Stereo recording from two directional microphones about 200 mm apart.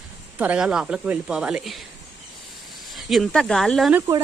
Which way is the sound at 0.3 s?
5° right (ahead or behind).